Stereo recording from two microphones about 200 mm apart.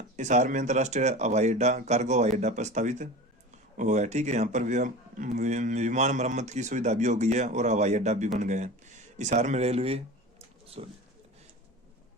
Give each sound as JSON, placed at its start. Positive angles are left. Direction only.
{"t": 0.2, "sound": "speech", "side_deg": -35}